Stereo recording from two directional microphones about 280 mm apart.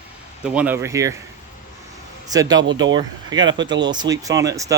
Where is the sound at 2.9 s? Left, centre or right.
Centre.